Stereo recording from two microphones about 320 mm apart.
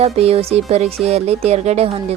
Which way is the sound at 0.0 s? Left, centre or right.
Centre.